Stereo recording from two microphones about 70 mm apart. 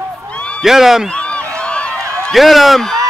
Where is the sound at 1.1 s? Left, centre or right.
Centre.